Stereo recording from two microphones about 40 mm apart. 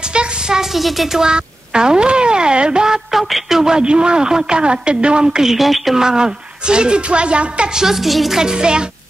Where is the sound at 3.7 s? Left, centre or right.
Right; by 5.9 s centre.